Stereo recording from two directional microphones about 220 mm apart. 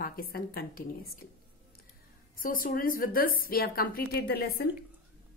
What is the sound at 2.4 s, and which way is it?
A woman's voice, 40° left (ahead or behind).